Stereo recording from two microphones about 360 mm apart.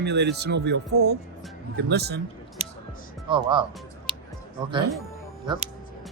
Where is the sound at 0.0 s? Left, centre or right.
Right.